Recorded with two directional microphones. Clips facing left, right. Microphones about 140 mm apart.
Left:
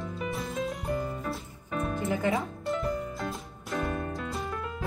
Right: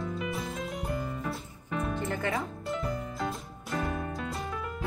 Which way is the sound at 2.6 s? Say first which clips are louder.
Left 3 dB; centre (ahead or behind).